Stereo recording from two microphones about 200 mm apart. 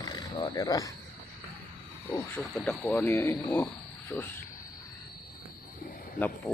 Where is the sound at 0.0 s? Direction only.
20° left (ahead or behind).